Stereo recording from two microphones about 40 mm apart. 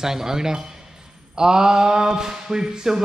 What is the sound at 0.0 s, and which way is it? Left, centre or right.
Speech, centre.